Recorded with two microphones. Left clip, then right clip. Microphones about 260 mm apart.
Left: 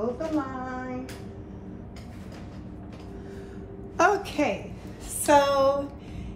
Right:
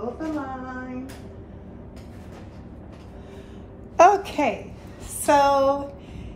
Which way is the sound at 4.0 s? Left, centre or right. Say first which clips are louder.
Right 7 dB; centre.